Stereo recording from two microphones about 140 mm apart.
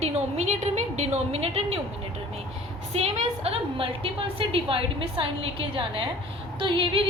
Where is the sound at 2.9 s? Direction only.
50° right (ahead or behind).